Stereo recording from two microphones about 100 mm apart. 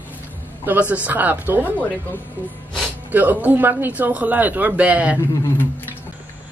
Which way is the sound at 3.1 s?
20° right (ahead or behind).